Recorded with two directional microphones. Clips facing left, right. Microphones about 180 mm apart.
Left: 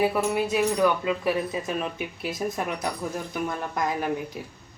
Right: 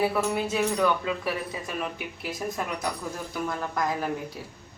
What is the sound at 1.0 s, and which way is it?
Speech, 20° left (ahead or behind).